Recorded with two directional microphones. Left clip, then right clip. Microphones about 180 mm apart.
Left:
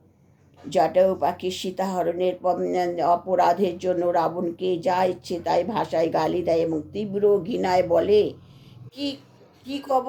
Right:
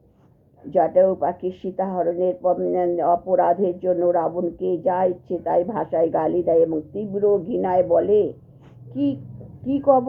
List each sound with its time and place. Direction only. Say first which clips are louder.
0.9 s speech: right 2 dB; 25° left (ahead or behind)
9.6 s a woman's voice: right 7 dB; 15° left (ahead or behind)